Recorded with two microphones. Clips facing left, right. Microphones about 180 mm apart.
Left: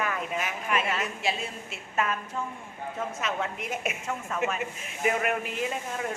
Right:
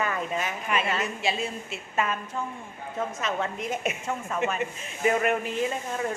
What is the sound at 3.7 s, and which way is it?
Speech, 5° left (ahead or behind).